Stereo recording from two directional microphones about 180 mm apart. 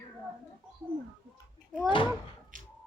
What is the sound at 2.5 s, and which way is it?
Music, 45° right (ahead or behind).